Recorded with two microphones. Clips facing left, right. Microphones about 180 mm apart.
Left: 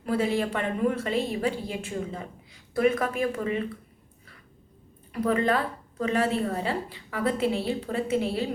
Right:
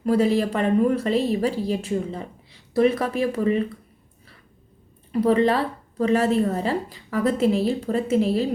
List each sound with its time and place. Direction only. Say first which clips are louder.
0.0 s a woman's voice: right 6 dB; 40° right (ahead or behind)
5.2 s a woman's voice: right 5 dB; 30° right (ahead or behind)